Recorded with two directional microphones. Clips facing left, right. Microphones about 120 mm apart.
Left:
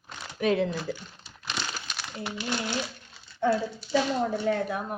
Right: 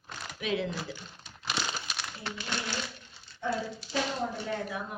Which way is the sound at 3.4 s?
65° left (ahead or behind).